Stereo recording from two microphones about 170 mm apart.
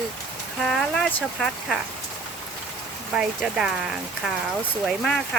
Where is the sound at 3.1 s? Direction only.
5° right (ahead or behind).